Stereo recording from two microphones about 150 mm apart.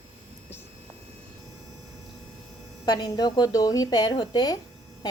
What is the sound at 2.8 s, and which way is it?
A woman's voice, 30° left (ahead or behind).